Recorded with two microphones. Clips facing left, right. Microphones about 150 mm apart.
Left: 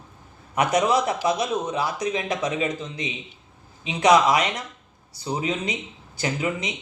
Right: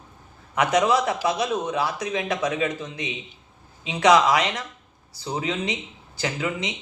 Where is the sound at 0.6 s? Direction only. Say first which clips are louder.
Even; 20° left (ahead or behind).